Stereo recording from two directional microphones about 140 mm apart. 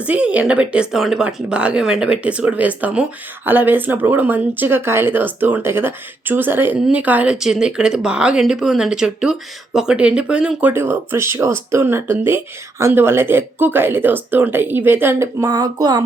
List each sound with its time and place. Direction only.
0.0 s speech: 10° right (ahead or behind); by 16.0 s 30° right (ahead or behind)